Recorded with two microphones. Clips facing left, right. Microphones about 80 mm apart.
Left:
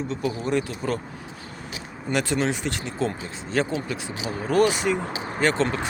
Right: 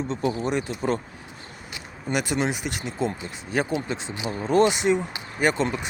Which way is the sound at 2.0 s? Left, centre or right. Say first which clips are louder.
Left 1 dB; centre.